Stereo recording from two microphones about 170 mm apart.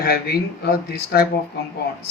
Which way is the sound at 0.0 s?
65° left (ahead or behind).